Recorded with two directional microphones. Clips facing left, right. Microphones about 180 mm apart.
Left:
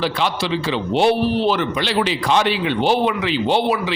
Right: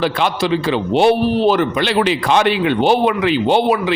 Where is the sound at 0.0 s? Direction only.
55° right (ahead or behind).